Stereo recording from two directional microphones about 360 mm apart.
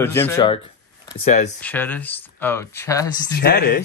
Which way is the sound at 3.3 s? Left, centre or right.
Left.